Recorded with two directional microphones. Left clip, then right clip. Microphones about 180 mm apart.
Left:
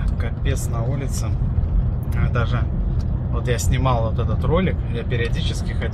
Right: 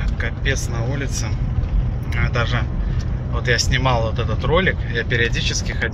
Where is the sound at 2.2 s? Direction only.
15° left (ahead or behind).